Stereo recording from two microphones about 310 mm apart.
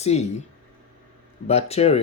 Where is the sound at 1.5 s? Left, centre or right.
Centre.